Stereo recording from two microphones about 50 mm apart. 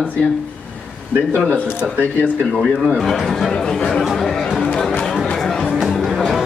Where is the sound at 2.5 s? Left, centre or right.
Centre.